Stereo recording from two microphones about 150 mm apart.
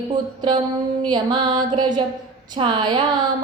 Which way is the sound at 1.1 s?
30° right (ahead or behind).